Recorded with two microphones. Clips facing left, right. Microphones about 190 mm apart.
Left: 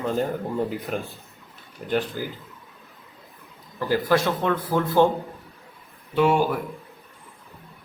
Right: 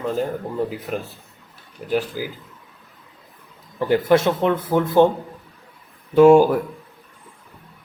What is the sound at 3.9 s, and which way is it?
Speech, 25° right (ahead or behind).